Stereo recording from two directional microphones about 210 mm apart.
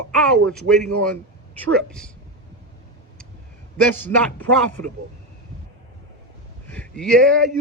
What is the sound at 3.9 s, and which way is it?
Speech, 10° left (ahead or behind).